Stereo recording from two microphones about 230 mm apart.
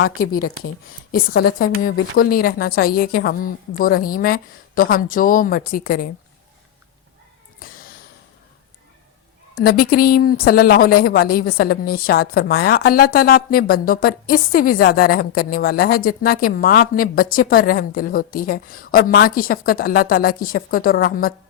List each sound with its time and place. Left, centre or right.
1.4 s a woman's voice: left
7.6 s cat: left
9.6 s a woman's voice: left